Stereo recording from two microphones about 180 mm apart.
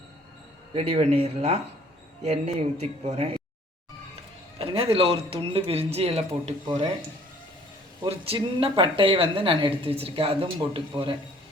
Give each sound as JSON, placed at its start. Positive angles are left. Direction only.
{"t": 0.7, "sound": "speech", "side_deg": -35}
{"t": 4.5, "sound": "speech", "side_deg": -30}
{"t": 8.0, "sound": "speech", "side_deg": -30}